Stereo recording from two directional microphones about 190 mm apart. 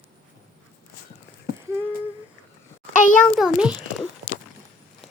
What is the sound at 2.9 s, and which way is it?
Speech, 40° left (ahead or behind).